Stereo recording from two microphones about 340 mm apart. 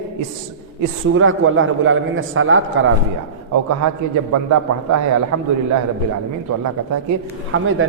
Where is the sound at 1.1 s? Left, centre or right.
Right.